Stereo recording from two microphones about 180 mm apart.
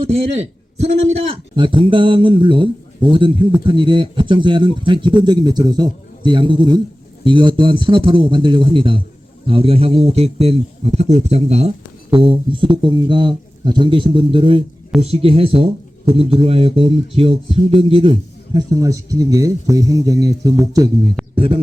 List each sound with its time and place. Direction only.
1.3 s speech: 25° right (ahead or behind)
21.3 s speech: 30° right (ahead or behind)